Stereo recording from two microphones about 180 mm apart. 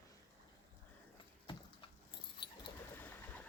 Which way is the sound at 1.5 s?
30° left (ahead or behind).